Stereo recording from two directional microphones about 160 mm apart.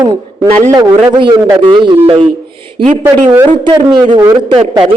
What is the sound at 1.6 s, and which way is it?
Speech, 30° right (ahead or behind).